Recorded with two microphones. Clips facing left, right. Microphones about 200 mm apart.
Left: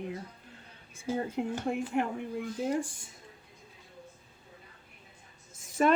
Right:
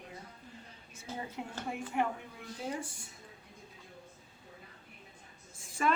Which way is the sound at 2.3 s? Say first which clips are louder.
Left 9 dB; 60° left (ahead or behind).